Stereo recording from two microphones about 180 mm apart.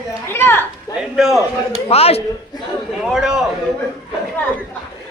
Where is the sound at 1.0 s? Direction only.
Centre (ahead or behind).